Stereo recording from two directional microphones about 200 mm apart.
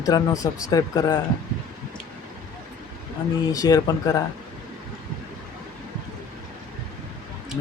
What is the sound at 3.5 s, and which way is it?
Speech, 20° left (ahead or behind).